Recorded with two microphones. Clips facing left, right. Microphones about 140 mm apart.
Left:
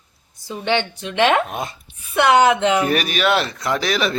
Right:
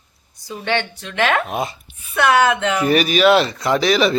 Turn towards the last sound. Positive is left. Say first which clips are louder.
# right 5 dB
turn(degrees=0)  # may be behind; listen again after turning